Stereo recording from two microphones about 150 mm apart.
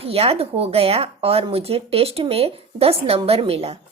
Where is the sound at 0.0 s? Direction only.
40° right (ahead or behind).